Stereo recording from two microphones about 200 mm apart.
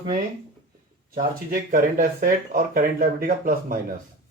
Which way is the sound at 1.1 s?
45° right (ahead or behind).